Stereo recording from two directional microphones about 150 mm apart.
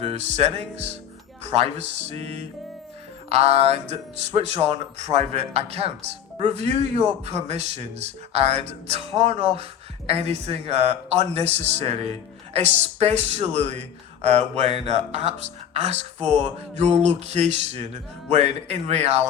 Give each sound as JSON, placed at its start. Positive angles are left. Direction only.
{"t": 0.0, "sound": "speech", "side_deg": -45}